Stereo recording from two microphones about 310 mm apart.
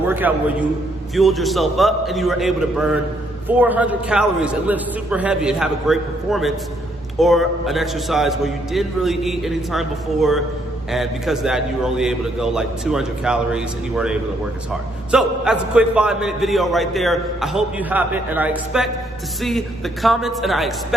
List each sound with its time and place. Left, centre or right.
0.1 s a man's voice: centre